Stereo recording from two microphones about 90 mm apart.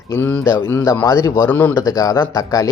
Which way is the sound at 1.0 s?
40° left (ahead or behind).